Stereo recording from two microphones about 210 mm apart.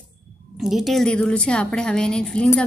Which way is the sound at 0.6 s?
Centre (ahead or behind).